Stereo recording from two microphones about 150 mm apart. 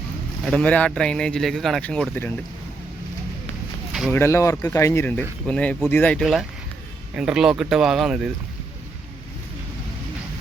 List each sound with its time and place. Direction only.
0.4 s speech: 5° left (ahead or behind)
4.1 s speech: 15° left (ahead or behind)
7.2 s speech: 5° right (ahead or behind)